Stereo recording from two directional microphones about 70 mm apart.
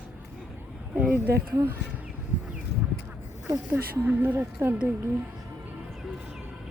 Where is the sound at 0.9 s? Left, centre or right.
Right.